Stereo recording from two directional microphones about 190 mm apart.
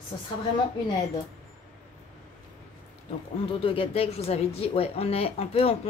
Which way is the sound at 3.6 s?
30° left (ahead or behind).